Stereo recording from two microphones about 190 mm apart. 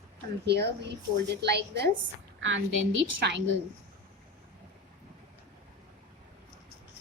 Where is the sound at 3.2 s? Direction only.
65° right (ahead or behind).